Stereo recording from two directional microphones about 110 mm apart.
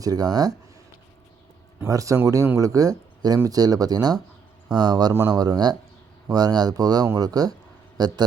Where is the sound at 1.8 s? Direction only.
30° right (ahead or behind).